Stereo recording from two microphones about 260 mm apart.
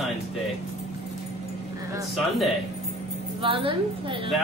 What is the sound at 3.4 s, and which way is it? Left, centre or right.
Speech, centre.